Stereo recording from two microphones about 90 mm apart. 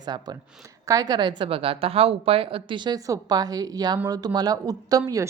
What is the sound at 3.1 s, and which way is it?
A woman's voice, 45° right (ahead or behind).